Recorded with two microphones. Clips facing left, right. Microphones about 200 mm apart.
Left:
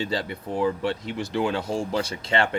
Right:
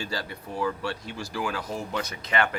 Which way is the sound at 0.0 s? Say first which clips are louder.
Left 6 dB; 25° left (ahead or behind).